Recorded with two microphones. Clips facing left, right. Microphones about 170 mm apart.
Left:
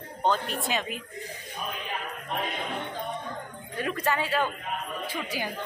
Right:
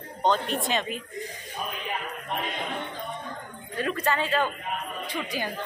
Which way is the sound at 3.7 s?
10° left (ahead or behind).